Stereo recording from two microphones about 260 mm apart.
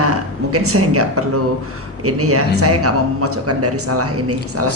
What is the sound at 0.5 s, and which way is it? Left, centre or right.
Speech, right.